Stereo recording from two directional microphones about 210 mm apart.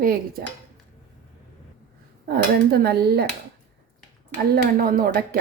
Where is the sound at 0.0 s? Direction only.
45° right (ahead or behind).